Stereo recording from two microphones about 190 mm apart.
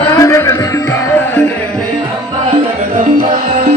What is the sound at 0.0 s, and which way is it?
Music, 15° left (ahead or behind).